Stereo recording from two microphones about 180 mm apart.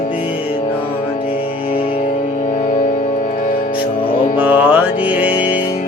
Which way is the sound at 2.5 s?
45° left (ahead or behind).